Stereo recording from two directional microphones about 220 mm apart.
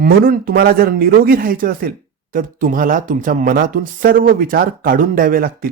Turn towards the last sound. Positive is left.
turn(degrees=-40)  # may be behind; listen again after turning